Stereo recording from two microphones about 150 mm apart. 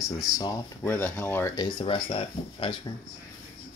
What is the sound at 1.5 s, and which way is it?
Speech, 30° left (ahead or behind).